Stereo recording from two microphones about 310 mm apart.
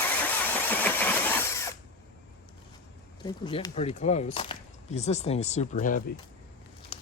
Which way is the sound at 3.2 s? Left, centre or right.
Centre.